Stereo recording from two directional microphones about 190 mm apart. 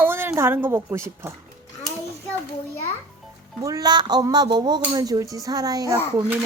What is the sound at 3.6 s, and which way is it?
A woman's voice, 20° right (ahead or behind).